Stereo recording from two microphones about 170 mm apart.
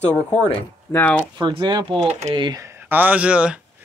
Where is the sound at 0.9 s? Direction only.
10° left (ahead or behind).